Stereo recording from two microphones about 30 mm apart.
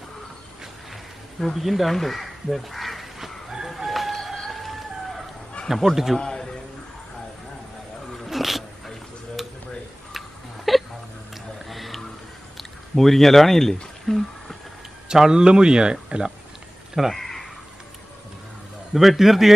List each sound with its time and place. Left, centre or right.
1.5 s speech: centre
3.6 s chicken: centre
4.5 s a sound: centre
5.7 s a man's voice: centre
6.1 s a sound: left
8.3 s dog: centre
9.4 s a sound: centre
10.1 s hiccup: centre
11.7 s music: centre
12.5 s speech: centre
14.0 s a sound: centre
15.3 s speech: right
17.1 s crow: centre
18.9 s a man's voice: centre